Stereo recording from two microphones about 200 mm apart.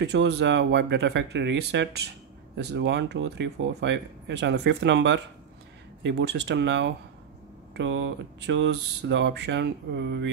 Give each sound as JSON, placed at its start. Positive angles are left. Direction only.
{"t": 0.0, "sound": "speech", "side_deg": -60}